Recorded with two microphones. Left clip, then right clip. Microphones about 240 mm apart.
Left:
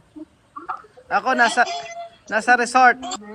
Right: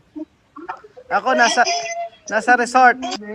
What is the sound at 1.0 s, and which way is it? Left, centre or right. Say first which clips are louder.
A man's voice: right 2 dB; centre.